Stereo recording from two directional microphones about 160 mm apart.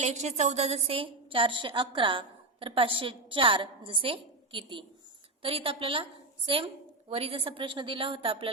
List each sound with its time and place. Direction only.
0.0 s a woman's voice: 45° right (ahead or behind)